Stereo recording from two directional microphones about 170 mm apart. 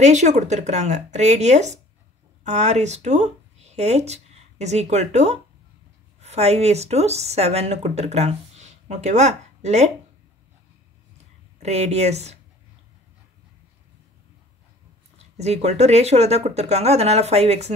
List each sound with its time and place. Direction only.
0.0 s speech: 45° right (ahead or behind)
11.6 s speech: 40° right (ahead or behind)
15.3 s speech: 40° right (ahead or behind)